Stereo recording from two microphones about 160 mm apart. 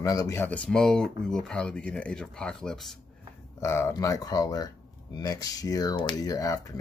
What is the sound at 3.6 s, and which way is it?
Speech, 15° left (ahead or behind).